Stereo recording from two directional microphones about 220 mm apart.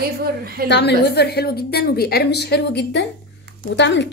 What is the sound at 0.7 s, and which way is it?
A woman's voice, 50° left (ahead or behind).